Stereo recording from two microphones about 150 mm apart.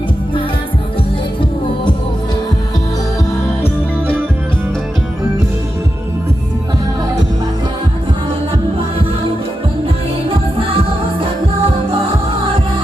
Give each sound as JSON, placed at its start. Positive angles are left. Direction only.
{"t": 10.2, "sound": "music", "side_deg": -40}